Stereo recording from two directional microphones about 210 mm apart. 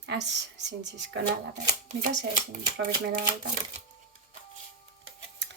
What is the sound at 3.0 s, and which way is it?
Speech, 40° right (ahead or behind).